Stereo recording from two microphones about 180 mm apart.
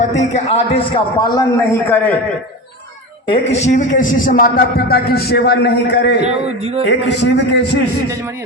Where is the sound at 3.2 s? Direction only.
35° left (ahead or behind); by 6.1 s 70° left (ahead or behind).